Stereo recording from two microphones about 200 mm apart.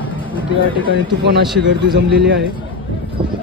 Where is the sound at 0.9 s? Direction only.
65° right (ahead or behind).